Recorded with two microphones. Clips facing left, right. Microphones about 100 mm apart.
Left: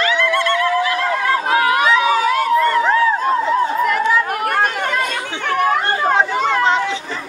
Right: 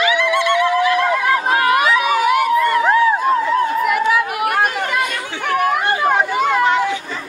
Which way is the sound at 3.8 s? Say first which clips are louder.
Even; 10° right (ahead or behind).